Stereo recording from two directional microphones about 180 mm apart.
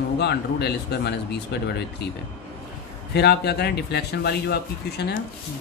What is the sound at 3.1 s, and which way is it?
A man's voice, 65° left (ahead or behind).